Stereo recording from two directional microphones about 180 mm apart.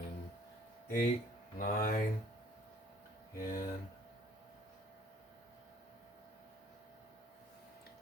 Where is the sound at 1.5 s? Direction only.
50° left (ahead or behind).